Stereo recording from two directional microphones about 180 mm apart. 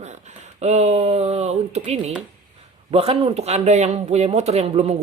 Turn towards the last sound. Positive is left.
turn(degrees=-35)  # may be behind; listen again after turning